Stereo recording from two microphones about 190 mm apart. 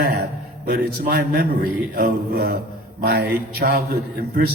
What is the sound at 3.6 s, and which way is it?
Speech, 55° right (ahead or behind).